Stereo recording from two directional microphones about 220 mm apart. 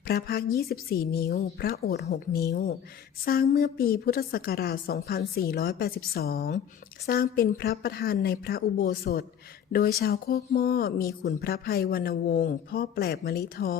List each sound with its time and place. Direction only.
0.1 s speech: 45° left (ahead or behind)